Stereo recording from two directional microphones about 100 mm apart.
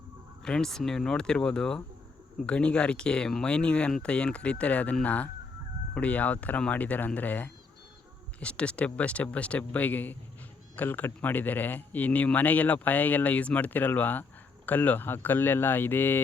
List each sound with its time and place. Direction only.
0.4 s speech: 5° left (ahead or behind)